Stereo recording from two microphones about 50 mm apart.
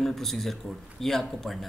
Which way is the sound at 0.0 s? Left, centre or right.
Centre.